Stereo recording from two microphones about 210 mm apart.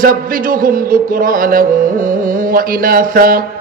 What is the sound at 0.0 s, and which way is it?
Mantra, 40° right (ahead or behind).